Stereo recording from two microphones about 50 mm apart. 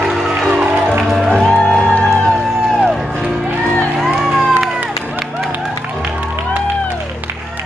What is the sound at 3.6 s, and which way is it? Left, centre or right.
Music, left.